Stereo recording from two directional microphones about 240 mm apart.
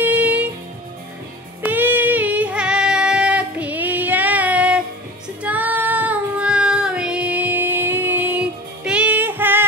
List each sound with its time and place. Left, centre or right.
0.0 s music: centre
1.6 s music: centre
5.4 s child singing: centre